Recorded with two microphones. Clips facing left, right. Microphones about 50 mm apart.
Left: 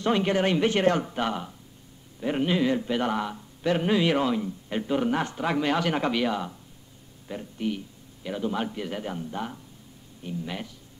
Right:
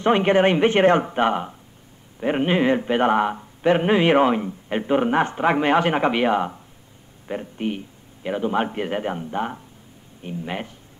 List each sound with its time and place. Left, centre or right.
0.0 s a man's voice: right